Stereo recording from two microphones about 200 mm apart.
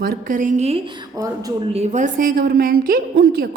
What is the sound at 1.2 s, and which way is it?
Speech, 15° right (ahead or behind).